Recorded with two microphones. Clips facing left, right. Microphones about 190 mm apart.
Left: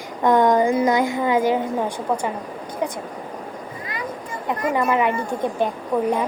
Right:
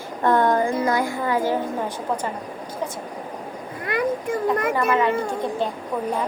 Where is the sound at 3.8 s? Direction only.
55° right (ahead or behind).